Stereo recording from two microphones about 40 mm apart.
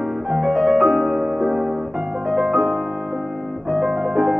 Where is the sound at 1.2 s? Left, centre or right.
Centre.